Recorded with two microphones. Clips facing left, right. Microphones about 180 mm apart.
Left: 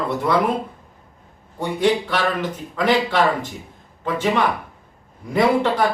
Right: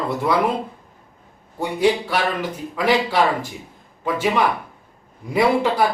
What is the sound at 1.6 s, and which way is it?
A man's voice, 10° right (ahead or behind).